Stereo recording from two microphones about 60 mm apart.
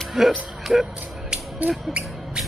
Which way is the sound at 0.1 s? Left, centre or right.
Centre.